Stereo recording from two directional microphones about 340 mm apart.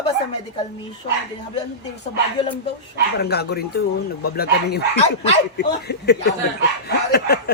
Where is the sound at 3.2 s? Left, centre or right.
Left.